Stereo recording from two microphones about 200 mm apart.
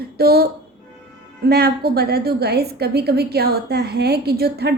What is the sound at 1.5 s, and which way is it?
A woman's voice, 50° right (ahead or behind).